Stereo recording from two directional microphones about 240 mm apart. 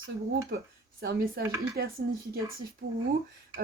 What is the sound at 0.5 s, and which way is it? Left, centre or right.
Speech, right.